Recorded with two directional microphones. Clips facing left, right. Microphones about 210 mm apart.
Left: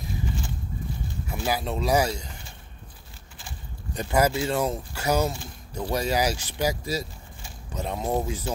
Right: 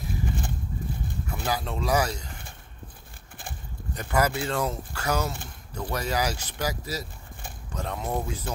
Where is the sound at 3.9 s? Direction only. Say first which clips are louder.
Left 3 dB; 20° left (ahead or behind).